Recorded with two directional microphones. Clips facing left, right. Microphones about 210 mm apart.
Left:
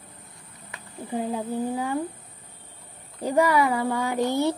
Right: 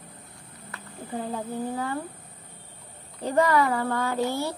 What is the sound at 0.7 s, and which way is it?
Speech, 15° left (ahead or behind).